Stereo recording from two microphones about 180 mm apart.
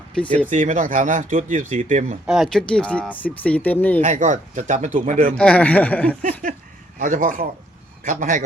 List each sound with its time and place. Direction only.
0.1 s speech: 5° left (ahead or behind)
0.5 s speech: 45° right (ahead or behind)
2.2 s speech: centre (ahead or behind)
4.0 s speech: 45° right (ahead or behind)
5.4 s speech: 5° left (ahead or behind)
7.0 s speech: 45° right (ahead or behind)